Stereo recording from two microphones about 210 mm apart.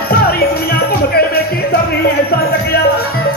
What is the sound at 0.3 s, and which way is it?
Music, 45° left (ahead or behind).